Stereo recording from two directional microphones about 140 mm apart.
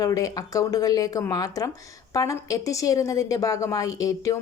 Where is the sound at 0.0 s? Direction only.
25° left (ahead or behind).